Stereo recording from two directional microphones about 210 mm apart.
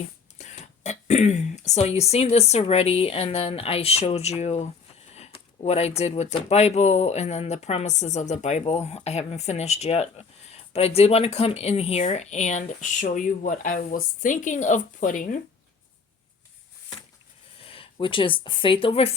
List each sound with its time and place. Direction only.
0.3 s speech: 35° left (ahead or behind)
17.6 s speech: 25° left (ahead or behind)